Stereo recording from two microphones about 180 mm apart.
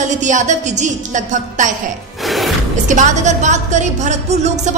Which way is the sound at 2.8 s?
45° right (ahead or behind).